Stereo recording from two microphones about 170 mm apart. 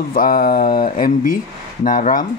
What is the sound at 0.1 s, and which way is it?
Speech, 55° left (ahead or behind).